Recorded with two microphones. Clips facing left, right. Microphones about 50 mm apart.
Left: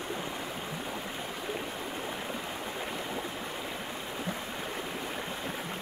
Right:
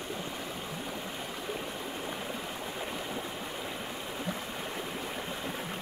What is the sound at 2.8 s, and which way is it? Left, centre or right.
Stream, centre.